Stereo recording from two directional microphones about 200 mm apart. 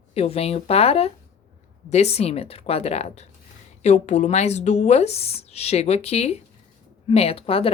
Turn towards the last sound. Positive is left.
turn(degrees=30)  # may be behind; listen again after turning